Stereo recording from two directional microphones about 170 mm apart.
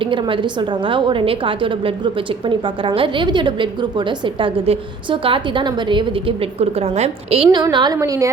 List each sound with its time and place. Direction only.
0.0 s a woman's voice: 30° right (ahead or behind)
7.5 s a woman's voice: 25° right (ahead or behind)